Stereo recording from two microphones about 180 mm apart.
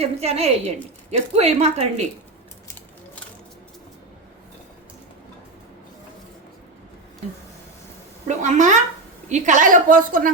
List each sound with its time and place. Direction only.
0.0 s a woman's voice: 35° right (ahead or behind)
8.3 s a woman's voice: 40° right (ahead or behind)